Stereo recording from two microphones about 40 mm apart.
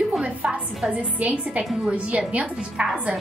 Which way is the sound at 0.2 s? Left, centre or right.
Right.